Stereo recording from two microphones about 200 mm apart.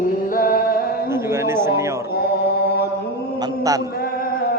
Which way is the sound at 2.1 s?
55° left (ahead or behind).